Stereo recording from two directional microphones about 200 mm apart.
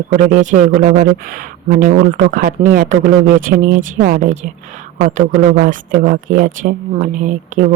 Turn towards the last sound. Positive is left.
turn(degrees=-40)  # may be behind; listen again after turning